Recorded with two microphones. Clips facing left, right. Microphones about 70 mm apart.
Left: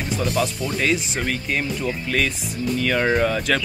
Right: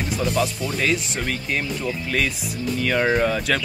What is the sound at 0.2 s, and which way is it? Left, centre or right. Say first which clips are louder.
Speech: even; centre.